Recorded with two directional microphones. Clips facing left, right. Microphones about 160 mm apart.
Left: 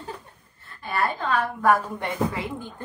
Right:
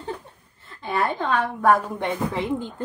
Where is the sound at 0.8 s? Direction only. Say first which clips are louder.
Right 2 dB; 20° right (ahead or behind).